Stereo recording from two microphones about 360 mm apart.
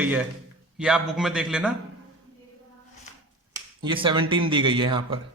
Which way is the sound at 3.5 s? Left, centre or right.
Centre.